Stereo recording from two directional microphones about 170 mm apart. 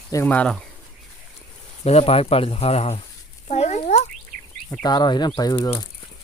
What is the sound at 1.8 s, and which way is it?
Speech, 35° left (ahead or behind).